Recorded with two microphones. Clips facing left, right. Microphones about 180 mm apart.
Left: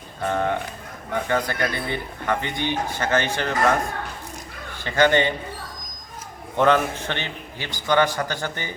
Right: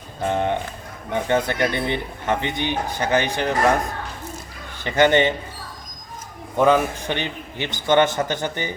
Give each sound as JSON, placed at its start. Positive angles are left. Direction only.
{"t": 0.2, "sound": "a man's voice", "side_deg": -20}
{"t": 4.8, "sound": "a man's voice", "side_deg": -20}
{"t": 6.6, "sound": "a man's voice", "side_deg": -10}